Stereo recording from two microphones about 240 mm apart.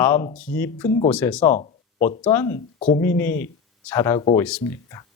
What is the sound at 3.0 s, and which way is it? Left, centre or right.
Speech, centre.